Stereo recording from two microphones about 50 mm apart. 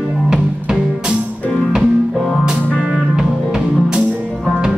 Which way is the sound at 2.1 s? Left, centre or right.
Centre.